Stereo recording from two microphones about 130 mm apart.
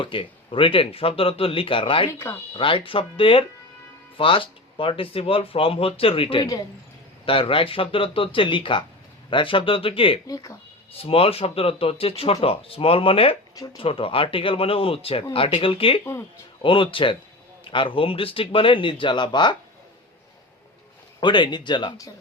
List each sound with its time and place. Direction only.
0.0 s speech: 40° left (ahead or behind)
2.0 s speech: 20° left (ahead or behind)
2.5 s speech: 40° left (ahead or behind)
6.4 s speech: 30° left (ahead or behind)
7.3 s speech: 45° left (ahead or behind)
10.2 s speech: 25° left (ahead or behind)
10.9 s speech: 45° left (ahead or behind)
21.2 s speech: 35° left (ahead or behind)